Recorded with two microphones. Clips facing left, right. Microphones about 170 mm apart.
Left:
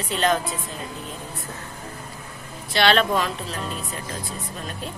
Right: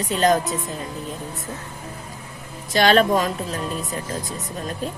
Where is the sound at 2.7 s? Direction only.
40° right (ahead or behind).